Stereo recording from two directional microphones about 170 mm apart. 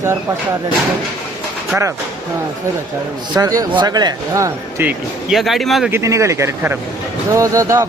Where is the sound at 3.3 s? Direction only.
20° right (ahead or behind); by 5.9 s centre (ahead or behind).